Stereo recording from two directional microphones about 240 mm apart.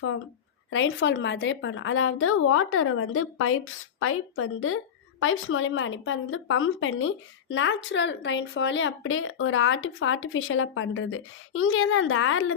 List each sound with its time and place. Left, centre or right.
0.7 s a woman's voice: left